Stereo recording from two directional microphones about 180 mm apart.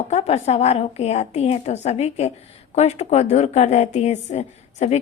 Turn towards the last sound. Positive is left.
turn(degrees=40)  # may be behind; listen again after turning